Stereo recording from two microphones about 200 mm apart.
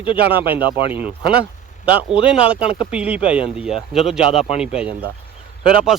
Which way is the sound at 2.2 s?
5° right (ahead or behind).